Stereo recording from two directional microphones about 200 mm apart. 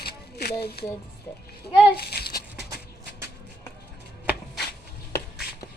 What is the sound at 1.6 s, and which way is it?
Speech, 55° left (ahead or behind).